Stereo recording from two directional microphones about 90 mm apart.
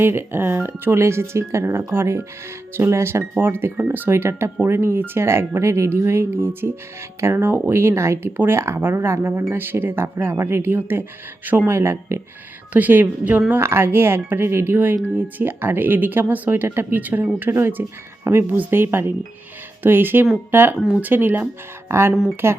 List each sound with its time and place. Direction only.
0.0 s speech: 25° right (ahead or behind)
12.7 s speech: 20° right (ahead or behind)